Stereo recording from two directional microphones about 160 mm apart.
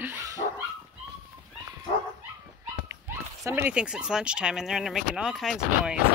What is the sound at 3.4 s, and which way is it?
Speech, 10° right (ahead or behind).